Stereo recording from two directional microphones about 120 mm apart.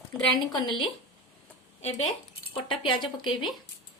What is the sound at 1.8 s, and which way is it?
Speech, 65° left (ahead or behind).